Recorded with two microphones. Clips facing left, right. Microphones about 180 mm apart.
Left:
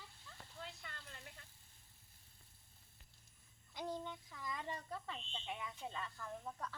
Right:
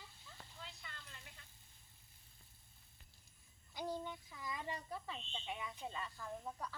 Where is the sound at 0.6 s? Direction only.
50° left (ahead or behind).